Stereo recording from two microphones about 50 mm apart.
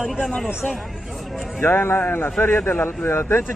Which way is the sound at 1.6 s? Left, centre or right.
Left.